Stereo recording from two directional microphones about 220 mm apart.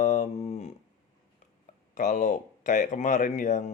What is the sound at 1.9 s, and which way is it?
Speech, 35° left (ahead or behind).